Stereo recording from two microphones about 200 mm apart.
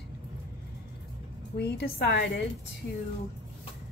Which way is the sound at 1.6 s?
55° left (ahead or behind).